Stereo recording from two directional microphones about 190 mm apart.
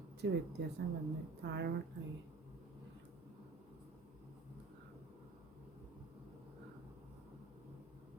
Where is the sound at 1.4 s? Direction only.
65° right (ahead or behind).